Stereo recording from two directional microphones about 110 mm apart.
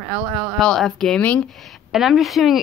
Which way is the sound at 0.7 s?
5° left (ahead or behind).